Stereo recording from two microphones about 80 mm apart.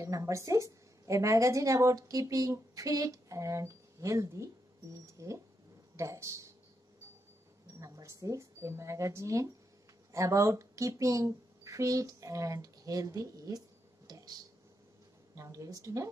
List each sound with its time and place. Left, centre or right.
0.0 s a woman's voice: right
7.8 s speech: right
14.0 s a sound: right
15.3 s a woman's voice: right